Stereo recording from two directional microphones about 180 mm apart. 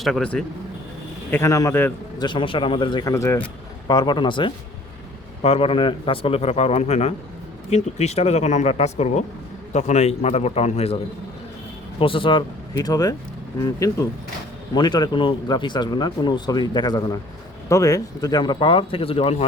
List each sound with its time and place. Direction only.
0.0 s speech: 5° left (ahead or behind)
1.3 s a man's voice: 15° left (ahead or behind)
2.1 s a man's voice: 25° left (ahead or behind)